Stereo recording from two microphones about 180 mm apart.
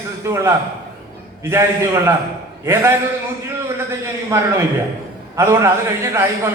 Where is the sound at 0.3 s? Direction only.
15° right (ahead or behind).